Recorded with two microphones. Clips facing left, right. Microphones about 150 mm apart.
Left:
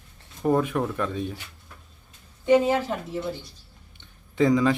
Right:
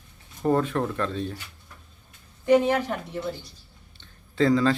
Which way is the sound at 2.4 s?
20° left (ahead or behind).